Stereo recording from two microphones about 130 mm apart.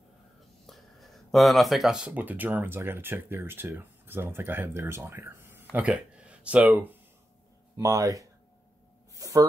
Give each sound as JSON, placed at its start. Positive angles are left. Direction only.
{"t": 0.7, "sound": "speech", "side_deg": 0}
{"t": 7.7, "sound": "speech", "side_deg": -25}